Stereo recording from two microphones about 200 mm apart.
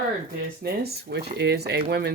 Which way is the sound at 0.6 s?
55° right (ahead or behind).